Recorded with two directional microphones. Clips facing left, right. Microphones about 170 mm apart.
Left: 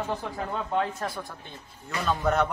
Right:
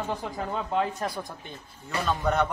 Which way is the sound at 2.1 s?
Centre (ahead or behind).